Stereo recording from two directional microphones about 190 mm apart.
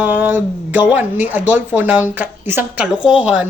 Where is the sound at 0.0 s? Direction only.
10° right (ahead or behind).